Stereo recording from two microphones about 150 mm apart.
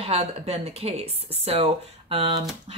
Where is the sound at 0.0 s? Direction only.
45° right (ahead or behind).